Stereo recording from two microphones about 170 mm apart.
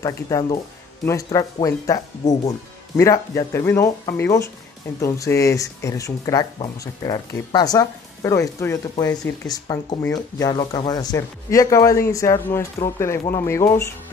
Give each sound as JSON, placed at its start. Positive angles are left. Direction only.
{"t": 0.0, "sound": "speech", "side_deg": 20}